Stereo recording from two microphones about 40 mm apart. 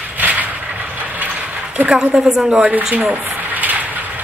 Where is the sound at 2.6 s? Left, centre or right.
Right.